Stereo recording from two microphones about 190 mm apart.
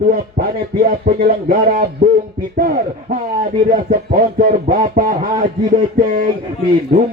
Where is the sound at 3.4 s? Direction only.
45° right (ahead or behind).